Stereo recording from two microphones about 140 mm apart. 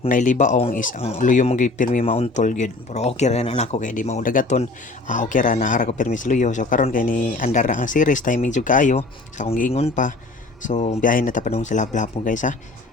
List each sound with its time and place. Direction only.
0.1 s speech: 65° left (ahead or behind)
2.0 s speech: 45° left (ahead or behind); by 9.0 s 70° left (ahead or behind)
9.0 s speech: 45° left (ahead or behind)
9.9 s speech: 65° left (ahead or behind)
11.0 s speech: 75° left (ahead or behind)